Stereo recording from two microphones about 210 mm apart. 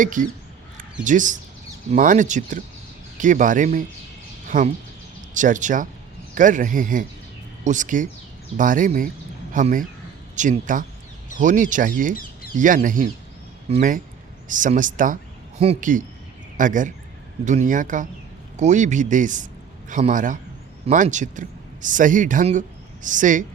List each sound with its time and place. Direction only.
0.0 s a man's voice: 40° right (ahead or behind)
12.1 s a sound: 45° left (ahead or behind)
12.5 s a man's voice: 40° right (ahead or behind)